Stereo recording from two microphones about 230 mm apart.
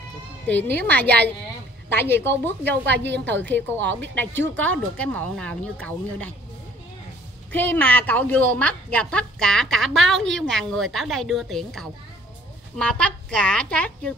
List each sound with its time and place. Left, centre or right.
0.5 s speech: centre
1.0 s a woman's voice: right
1.9 s speech: centre
3.1 s a woman's voice: right
3.4 s speech: centre
7.5 s a woman's voice: centre